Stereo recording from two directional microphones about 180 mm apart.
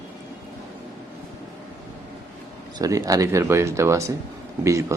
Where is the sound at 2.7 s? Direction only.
20° right (ahead or behind).